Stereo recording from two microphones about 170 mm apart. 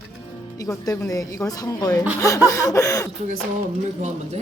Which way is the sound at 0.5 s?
20° left (ahead or behind).